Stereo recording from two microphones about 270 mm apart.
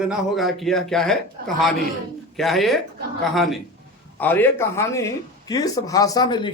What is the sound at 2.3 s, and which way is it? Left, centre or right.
Speech, centre.